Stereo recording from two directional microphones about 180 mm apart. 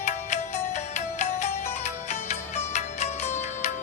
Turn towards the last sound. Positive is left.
turn(degrees=40)  # may be behind; listen again after turning